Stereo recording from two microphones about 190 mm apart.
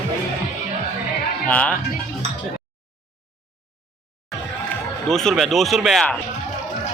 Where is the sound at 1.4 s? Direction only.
5° left (ahead or behind).